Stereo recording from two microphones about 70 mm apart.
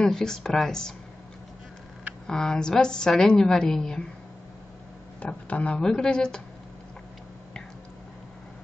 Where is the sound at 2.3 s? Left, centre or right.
Centre.